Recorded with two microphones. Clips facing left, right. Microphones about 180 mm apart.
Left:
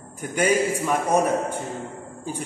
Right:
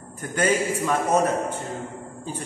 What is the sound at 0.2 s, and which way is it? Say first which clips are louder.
A man's voice: left 2 dB; 10° left (ahead or behind).